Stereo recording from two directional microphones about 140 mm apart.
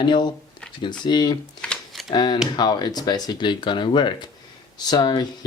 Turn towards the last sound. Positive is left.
turn(degrees=30)  # may be behind; listen again after turning